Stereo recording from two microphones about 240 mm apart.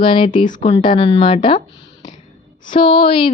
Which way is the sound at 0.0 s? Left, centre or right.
Left.